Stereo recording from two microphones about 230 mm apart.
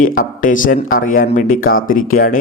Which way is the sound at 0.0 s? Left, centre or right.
Left.